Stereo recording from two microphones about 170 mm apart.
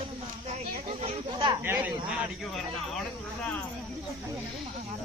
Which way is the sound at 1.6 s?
10° right (ahead or behind).